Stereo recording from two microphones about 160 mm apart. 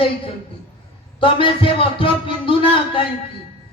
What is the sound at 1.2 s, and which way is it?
A man's voice, 35° left (ahead or behind).